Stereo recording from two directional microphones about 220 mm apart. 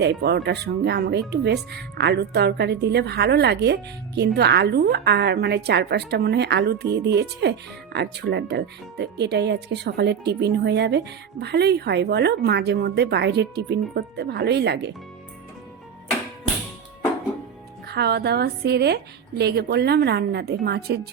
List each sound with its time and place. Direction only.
0.0 s speech: 50° right (ahead or behind)
17.8 s speech: 50° right (ahead or behind)